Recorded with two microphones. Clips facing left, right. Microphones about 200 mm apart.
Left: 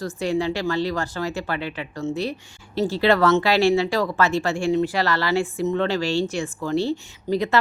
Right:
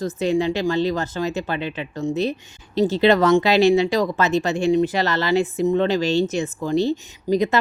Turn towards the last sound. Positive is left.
turn(degrees=-20)  # may be behind; listen again after turning